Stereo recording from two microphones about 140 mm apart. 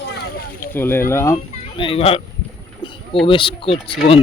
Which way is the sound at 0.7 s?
15° left (ahead or behind).